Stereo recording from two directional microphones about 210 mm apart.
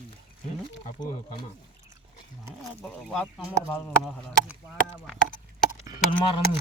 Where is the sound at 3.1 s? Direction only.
5° left (ahead or behind).